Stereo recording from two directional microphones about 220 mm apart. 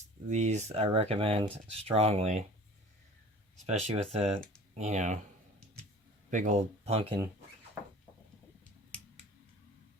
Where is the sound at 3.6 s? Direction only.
30° right (ahead or behind).